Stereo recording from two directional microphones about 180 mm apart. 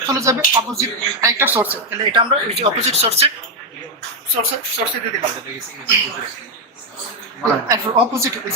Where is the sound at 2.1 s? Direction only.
30° right (ahead or behind).